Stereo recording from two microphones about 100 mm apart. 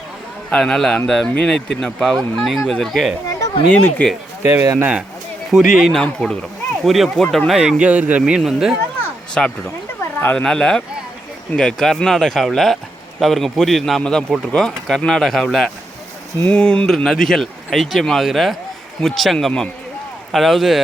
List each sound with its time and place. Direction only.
0.5 s speech: 5° left (ahead or behind)
3.7 s speech: 15° left (ahead or behind)
5.5 s speech: 5° right (ahead or behind)
8.2 s speech: 5° right (ahead or behind)
9.4 s speech: 5° left (ahead or behind)
10.0 s a sound: 20° left (ahead or behind)
10.3 s speech: 10° left (ahead or behind)